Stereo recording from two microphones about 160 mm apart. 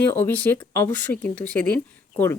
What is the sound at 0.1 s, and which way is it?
A woman's voice, 10° left (ahead or behind).